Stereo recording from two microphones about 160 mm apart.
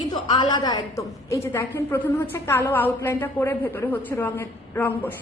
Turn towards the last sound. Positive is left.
turn(degrees=15)  # may be behind; listen again after turning